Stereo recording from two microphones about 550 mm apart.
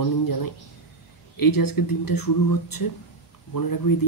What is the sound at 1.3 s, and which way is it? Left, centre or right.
A woman's voice, left.